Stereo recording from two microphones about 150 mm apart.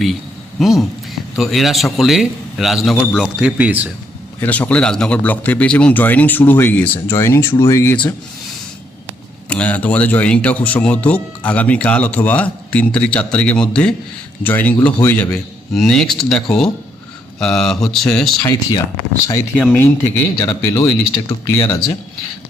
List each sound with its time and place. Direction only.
0.6 s a man's voice: centre (ahead or behind)
4.4 s speech: 10° left (ahead or behind)
9.5 s a man's voice: 10° left (ahead or behind)
18.4 s speech: 25° left (ahead or behind)
19.5 s speech: 10° left (ahead or behind); by 21.9 s 30° left (ahead or behind)